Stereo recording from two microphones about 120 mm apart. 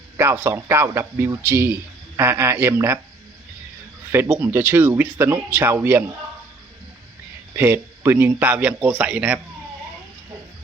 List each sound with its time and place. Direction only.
0.2 s speech: 20° right (ahead or behind)
4.1 s speech: 20° right (ahead or behind)
7.5 s a man's voice: 20° right (ahead or behind)